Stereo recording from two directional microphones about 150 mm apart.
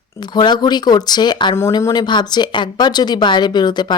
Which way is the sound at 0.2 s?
30° left (ahead or behind).